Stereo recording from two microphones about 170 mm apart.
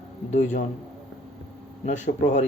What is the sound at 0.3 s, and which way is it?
Speech, 45° left (ahead or behind).